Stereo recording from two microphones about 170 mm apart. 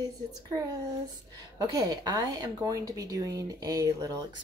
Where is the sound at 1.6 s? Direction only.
25° right (ahead or behind).